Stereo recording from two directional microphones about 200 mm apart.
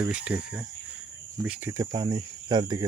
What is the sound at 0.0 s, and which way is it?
Speech, 5° right (ahead or behind).